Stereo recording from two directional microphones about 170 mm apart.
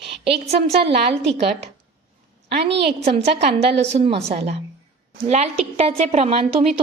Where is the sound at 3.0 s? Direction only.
40° right (ahead or behind).